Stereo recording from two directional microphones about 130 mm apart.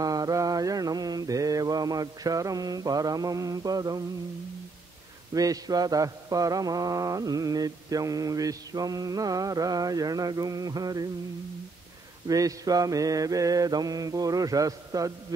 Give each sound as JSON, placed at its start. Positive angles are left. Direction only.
{"t": 0.0, "sound": "mantra", "side_deg": -30}
{"t": 5.3, "sound": "mantra", "side_deg": -30}
{"t": 12.3, "sound": "mantra", "side_deg": -25}